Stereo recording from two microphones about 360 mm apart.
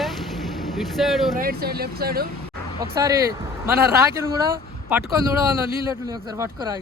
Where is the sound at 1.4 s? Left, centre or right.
Right.